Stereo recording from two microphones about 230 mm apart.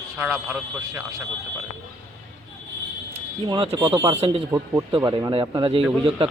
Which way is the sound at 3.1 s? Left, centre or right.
Right.